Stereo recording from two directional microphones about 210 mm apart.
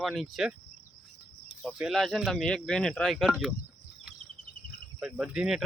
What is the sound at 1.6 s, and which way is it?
Speech, centre (ahead or behind).